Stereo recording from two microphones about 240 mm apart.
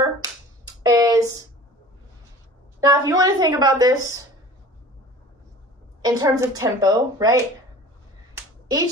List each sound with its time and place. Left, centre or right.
0.8 s a sound: centre
2.8 s a woman's voice: centre
6.0 s a woman's voice: centre
8.4 s finger snapping: centre